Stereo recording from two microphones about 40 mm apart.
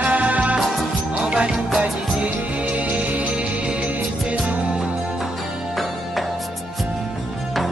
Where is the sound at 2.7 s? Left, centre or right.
Right.